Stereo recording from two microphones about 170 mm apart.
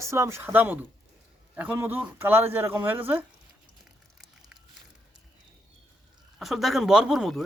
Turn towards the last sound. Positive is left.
turn(degrees=0)  # may be behind; listen again after turning